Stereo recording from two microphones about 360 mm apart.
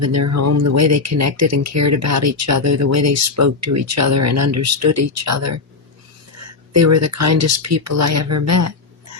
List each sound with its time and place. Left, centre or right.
0.0 s speech: right
6.7 s speech: right